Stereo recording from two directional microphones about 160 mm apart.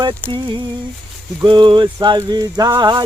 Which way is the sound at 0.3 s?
30° right (ahead or behind).